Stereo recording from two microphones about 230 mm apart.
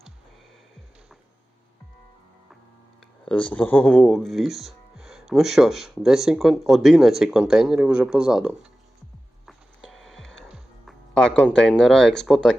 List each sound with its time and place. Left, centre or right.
3.0 s speech: centre
9.5 s music: centre